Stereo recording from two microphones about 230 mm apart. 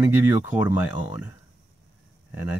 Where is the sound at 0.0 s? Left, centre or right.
Centre.